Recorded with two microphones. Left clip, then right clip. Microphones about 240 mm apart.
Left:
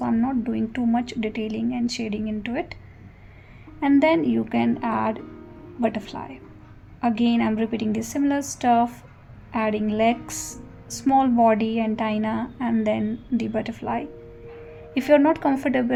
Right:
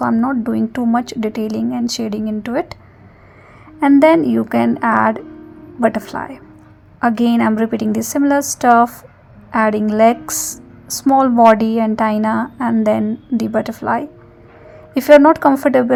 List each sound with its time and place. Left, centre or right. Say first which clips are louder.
0.0 s a woman's voice: right 8 dB; centre
4.0 s a woman's voice: right 9 dB; right